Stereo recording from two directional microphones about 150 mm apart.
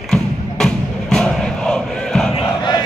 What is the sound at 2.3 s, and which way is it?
Battle cry, 30° left (ahead or behind).